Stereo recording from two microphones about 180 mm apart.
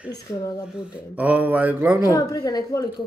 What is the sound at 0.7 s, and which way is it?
A man's voice, 5° right (ahead or behind).